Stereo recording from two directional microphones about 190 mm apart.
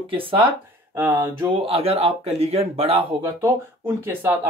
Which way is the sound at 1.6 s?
30° right (ahead or behind).